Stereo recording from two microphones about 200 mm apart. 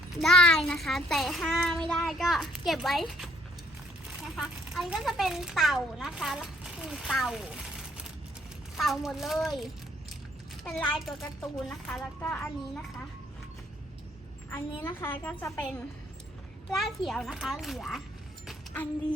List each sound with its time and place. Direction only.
0.2 s a child's voice: centre (ahead or behind)
14.5 s a child's voice: 10° left (ahead or behind)
18.4 s a sound: 10° left (ahead or behind)